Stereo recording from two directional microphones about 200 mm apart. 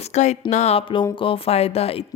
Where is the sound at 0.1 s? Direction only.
35° left (ahead or behind).